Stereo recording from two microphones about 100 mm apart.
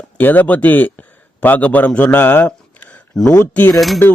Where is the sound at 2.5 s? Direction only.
10° left (ahead or behind).